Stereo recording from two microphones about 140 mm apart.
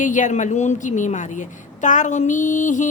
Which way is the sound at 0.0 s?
65° left (ahead or behind).